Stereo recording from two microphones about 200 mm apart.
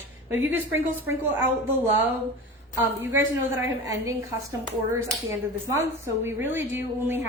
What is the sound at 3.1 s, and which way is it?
Speech, 10° right (ahead or behind).